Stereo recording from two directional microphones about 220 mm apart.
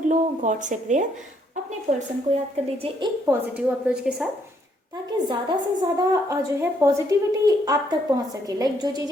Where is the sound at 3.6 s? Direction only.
5° right (ahead or behind).